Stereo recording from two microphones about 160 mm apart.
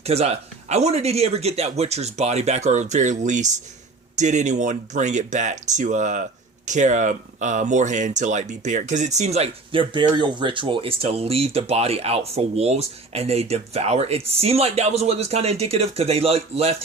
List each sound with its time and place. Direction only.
0.0 s speech: 40° right (ahead or behind)